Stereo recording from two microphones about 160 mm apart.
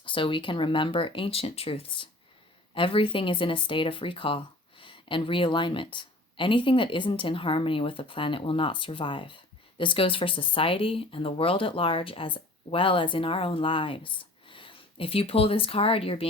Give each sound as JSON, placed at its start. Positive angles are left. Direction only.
{"t": 0.0, "sound": "speech", "side_deg": 30}